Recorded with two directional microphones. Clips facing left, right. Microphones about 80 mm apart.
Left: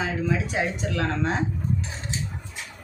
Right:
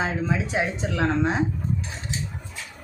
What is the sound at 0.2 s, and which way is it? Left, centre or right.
Speech, right.